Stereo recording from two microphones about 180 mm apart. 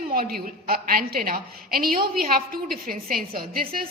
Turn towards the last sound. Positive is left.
turn(degrees=-55)  # may be behind; listen again after turning